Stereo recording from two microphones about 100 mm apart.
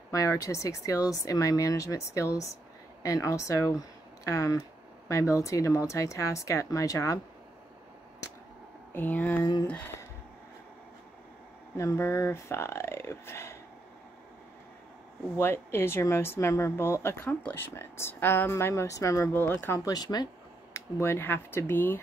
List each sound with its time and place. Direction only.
0.1 s speech: 35° left (ahead or behind)
8.9 s speech: 15° left (ahead or behind)
11.7 s speech: 30° left (ahead or behind)
15.3 s speech: 25° left (ahead or behind)
19.3 s speech: 20° left (ahead or behind)
19.8 s speech: 40° left (ahead or behind)
20.7 s speech: 25° left (ahead or behind)